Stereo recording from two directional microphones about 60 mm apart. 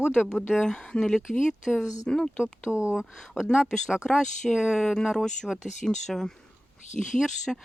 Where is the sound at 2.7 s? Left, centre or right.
Centre.